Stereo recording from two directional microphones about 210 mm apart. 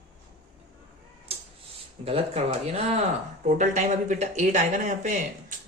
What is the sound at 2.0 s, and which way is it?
Speech, 30° right (ahead or behind).